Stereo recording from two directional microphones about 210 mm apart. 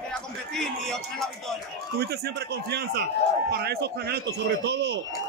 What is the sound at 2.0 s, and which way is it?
Speech, 50° right (ahead or behind).